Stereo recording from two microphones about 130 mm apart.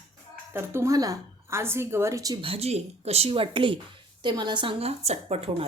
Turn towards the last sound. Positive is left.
turn(degrees=-50)  # may be behind; listen again after turning